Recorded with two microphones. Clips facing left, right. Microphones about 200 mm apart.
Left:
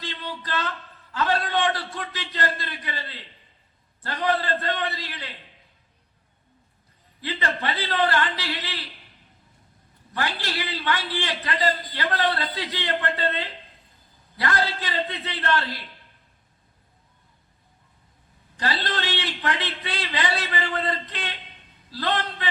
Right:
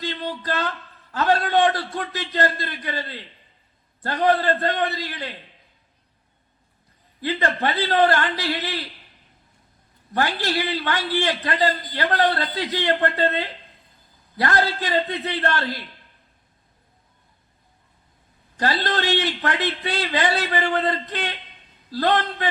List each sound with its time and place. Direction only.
0.1 s a sound: 45° right (ahead or behind)
1.1 s a man's voice: 45° right (ahead or behind)
7.2 s a man's voice: 45° right (ahead or behind)
10.2 s a man's voice: 40° right (ahead or behind)
11.9 s a man's voice: 45° right (ahead or behind)
18.6 s a man's voice: 40° right (ahead or behind)